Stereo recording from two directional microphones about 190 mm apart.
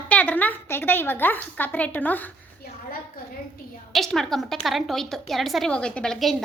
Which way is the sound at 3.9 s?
Centre (ahead or behind).